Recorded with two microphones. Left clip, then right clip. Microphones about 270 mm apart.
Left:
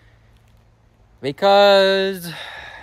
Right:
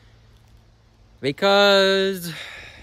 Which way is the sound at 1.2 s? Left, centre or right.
Centre.